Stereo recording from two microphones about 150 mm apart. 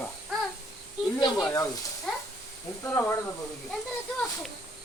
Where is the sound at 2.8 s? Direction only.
15° left (ahead or behind).